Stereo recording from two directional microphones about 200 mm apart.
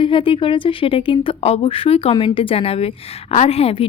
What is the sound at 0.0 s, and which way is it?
Speech, 25° left (ahead or behind).